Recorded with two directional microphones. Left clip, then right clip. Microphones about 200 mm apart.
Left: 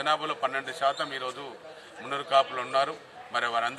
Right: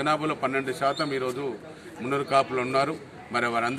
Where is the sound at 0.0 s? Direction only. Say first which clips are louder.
Right 2 dB; centre (ahead or behind).